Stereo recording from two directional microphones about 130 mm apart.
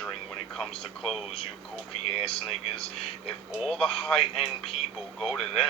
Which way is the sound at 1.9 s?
50° left (ahead or behind).